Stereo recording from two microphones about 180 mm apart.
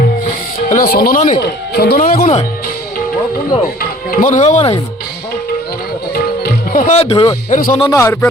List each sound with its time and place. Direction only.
0.7 s speech: 55° left (ahead or behind)
1.4 s speech: 65° left (ahead or behind)
3.8 s speech: 50° left (ahead or behind)
6.4 s speech: 50° left (ahead or behind); by 7.3 s 30° left (ahead or behind)
7.5 s speech: 45° left (ahead or behind)
7.9 s speech: 15° left (ahead or behind)